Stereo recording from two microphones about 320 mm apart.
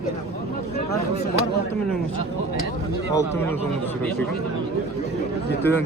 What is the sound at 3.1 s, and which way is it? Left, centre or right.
Speech, centre.